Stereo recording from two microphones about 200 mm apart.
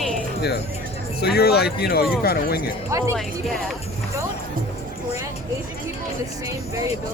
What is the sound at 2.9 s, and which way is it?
Speech, 15° right (ahead or behind).